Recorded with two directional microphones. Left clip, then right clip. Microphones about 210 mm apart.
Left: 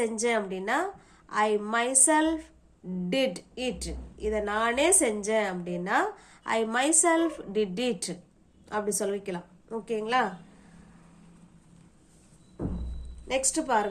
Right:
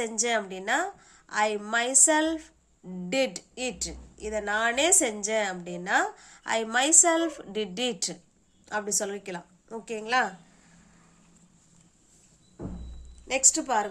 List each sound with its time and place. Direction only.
0.0 s speech: 20° right (ahead or behind)
13.2 s speech: 20° right (ahead or behind)